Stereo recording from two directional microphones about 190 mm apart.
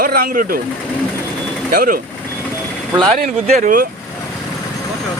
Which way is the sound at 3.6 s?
45° right (ahead or behind).